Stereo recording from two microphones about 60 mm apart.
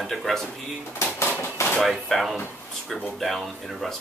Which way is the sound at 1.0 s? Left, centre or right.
Left.